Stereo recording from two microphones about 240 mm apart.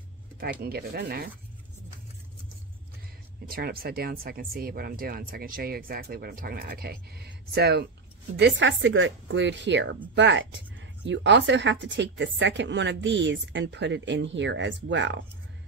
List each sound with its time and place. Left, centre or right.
0.4 s speech: right
3.4 s a woman's voice: right